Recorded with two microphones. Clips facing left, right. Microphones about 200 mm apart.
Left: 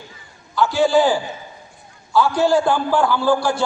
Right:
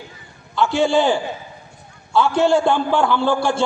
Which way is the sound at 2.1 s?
25° right (ahead or behind).